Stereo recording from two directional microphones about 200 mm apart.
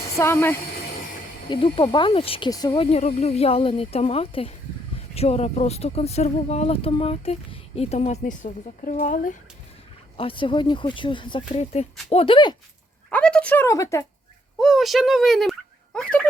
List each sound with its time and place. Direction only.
0.2 s a woman's voice: 10° left (ahead or behind)
1.5 s speech: 25° left (ahead or behind); by 9.3 s 40° left (ahead or behind)
10.2 s speech: 25° left (ahead or behind)
13.1 s speech: 5° left (ahead or behind)
14.6 s speech: centre (ahead or behind)